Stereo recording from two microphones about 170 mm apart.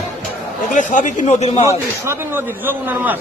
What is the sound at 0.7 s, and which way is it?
Speech, 50° left (ahead or behind).